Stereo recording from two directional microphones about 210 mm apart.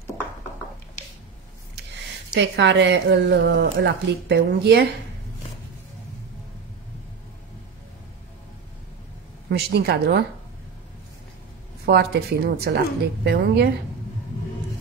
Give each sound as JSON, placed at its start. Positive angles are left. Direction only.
{"t": 2.3, "sound": "speech", "side_deg": -55}
{"t": 9.5, "sound": "speech", "side_deg": -50}
{"t": 11.8, "sound": "speech", "side_deg": -50}